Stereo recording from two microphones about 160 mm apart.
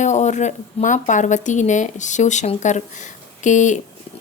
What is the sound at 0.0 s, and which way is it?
Speech, 50° left (ahead or behind).